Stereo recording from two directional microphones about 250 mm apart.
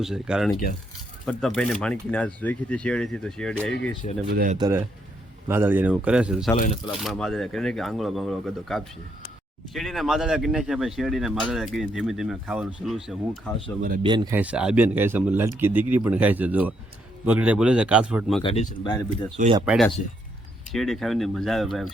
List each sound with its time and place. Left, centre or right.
0.0 s speech: centre
0.5 s speech: left
1.2 s speech: centre
4.3 s speech: right
4.5 s speech: centre
14.0 s speech: centre
18.4 s speech: left
19.5 s speech: centre